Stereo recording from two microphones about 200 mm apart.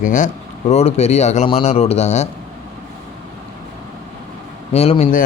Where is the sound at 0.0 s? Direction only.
40° left (ahead or behind).